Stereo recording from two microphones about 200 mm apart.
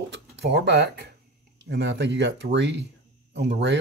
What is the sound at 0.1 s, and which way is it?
Speech, 55° right (ahead or behind).